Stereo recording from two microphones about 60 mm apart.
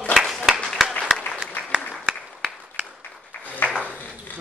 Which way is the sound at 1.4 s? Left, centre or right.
Right.